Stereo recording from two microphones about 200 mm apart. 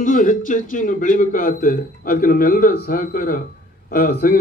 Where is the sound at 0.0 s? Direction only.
40° left (ahead or behind).